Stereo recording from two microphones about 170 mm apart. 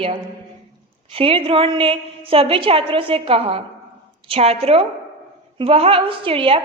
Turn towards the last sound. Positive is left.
turn(degrees=-35)  # may be behind; listen again after turning